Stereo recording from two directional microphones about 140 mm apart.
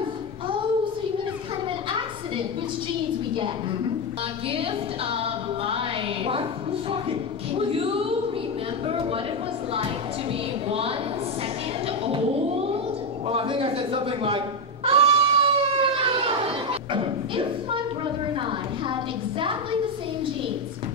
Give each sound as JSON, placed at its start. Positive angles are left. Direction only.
{"t": 5.1, "sound": "music", "side_deg": -40}
{"t": 7.7, "sound": "a woman's voice", "side_deg": -40}
{"t": 10.7, "sound": "a woman's voice", "side_deg": -45}
{"t": 13.3, "sound": "a man's voice", "side_deg": -40}
{"t": 14.9, "sound": "cat", "side_deg": -40}